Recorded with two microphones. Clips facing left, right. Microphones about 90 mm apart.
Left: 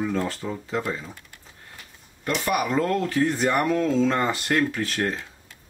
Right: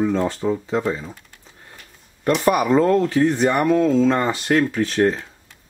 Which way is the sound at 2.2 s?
40° right (ahead or behind).